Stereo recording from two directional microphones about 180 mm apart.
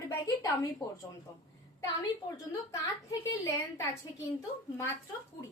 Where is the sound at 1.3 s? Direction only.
20° left (ahead or behind).